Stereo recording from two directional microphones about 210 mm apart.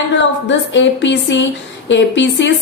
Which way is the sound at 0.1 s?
60° left (ahead or behind).